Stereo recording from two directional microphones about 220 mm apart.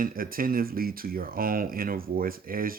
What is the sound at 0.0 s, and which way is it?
Speech, 40° right (ahead or behind).